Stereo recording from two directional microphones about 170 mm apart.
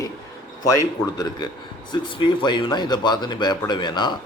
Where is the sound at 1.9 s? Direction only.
30° left (ahead or behind).